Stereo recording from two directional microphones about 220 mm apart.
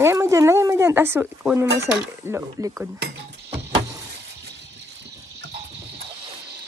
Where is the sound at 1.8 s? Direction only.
10° right (ahead or behind).